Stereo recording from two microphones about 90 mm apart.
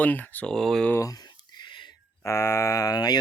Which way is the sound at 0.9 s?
40° left (ahead or behind).